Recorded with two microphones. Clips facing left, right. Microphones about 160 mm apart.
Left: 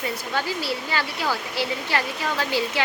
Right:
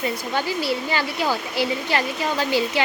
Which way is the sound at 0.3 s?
15° right (ahead or behind).